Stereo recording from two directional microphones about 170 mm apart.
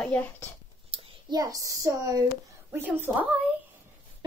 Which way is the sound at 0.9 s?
20° right (ahead or behind).